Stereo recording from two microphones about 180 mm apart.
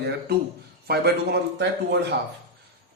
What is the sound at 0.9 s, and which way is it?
Speech, 65° right (ahead or behind).